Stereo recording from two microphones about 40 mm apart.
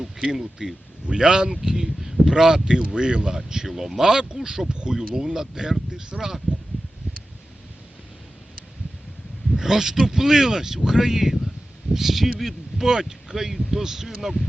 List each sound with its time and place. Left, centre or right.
0.3 s speech: centre
1.0 s speech: centre
6.1 s speech: centre
9.6 s speech: centre